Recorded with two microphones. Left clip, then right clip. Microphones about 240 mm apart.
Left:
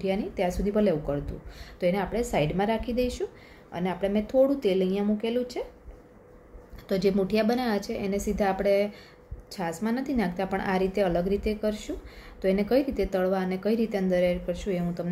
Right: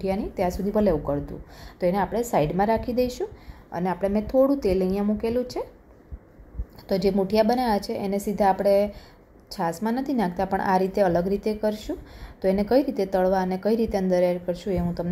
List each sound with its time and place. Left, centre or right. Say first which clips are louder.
0.0 s a woman's voice: right 2 dB; centre
6.9 s a woman's voice: right 2 dB; centre